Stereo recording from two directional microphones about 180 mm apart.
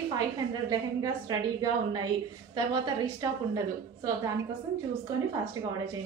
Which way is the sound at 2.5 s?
20° right (ahead or behind).